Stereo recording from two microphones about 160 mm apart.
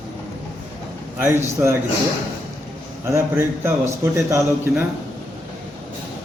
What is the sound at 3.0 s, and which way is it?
A man's voice, 15° right (ahead or behind).